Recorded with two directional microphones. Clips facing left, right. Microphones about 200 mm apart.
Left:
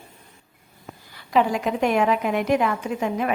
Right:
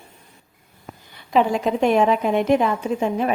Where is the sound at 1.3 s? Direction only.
25° right (ahead or behind).